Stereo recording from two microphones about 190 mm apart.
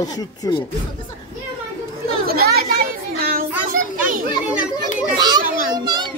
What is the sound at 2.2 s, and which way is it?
Children playing, 55° right (ahead or behind).